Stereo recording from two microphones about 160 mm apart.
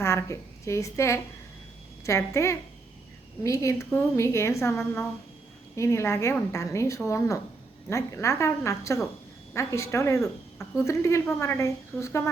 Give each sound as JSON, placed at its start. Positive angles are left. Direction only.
{"t": 0.0, "sound": "a woman's voice", "side_deg": 15}